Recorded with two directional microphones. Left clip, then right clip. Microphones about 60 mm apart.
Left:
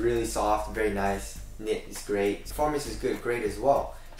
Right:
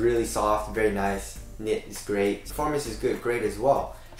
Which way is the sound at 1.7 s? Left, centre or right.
Centre.